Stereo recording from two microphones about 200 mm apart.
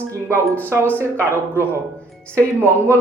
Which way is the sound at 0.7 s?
10° left (ahead or behind).